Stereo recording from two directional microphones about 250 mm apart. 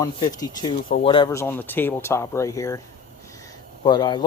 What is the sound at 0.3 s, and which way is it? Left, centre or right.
Speech, centre.